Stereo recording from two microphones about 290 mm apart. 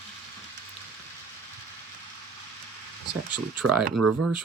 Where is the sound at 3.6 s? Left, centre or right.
Right.